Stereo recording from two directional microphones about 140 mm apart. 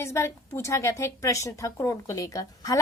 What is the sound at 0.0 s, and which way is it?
A woman's voice, 20° left (ahead or behind).